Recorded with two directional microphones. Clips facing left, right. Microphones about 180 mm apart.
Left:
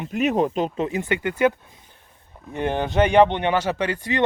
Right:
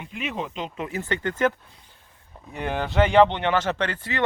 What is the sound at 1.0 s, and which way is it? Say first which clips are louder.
Speech: left 2 dB; 10° left (ahead or behind).